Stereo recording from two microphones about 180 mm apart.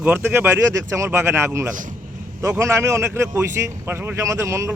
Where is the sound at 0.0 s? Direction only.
10° right (ahead or behind).